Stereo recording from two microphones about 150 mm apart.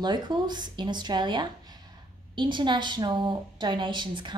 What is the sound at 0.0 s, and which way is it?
A woman's voice, 30° right (ahead or behind).